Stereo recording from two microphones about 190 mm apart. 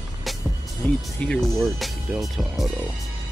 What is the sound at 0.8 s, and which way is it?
Speech, 5° left (ahead or behind).